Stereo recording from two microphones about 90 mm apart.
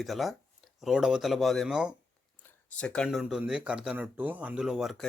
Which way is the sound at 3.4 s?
10° right (ahead or behind).